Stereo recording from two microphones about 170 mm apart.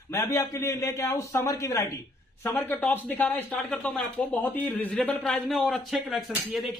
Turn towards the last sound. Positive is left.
turn(degrees=0)  # may be behind; listen again after turning